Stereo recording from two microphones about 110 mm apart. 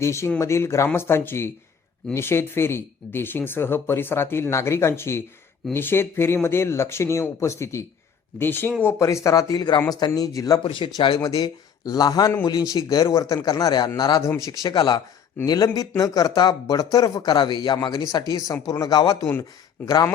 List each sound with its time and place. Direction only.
0.0 s speech: 25° left (ahead or behind)
10.6 s speech: 50° left (ahead or behind)
11.2 s speech: 35° left (ahead or behind)
14.7 s speech: 40° left (ahead or behind)